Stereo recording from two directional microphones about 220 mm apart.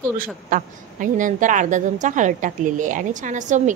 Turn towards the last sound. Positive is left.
turn(degrees=-35)  # may be behind; listen again after turning